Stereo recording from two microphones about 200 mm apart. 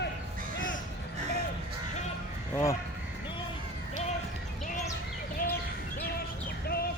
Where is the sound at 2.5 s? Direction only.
15° left (ahead or behind).